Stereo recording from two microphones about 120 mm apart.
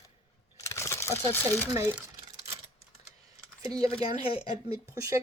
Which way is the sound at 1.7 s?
25° right (ahead or behind).